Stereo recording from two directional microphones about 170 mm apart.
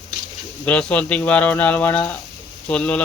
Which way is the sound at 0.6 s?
5° left (ahead or behind).